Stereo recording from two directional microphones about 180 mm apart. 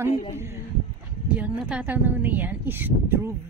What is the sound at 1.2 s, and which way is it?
Speech, 5° right (ahead or behind).